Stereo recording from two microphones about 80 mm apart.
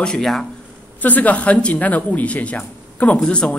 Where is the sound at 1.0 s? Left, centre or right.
Left.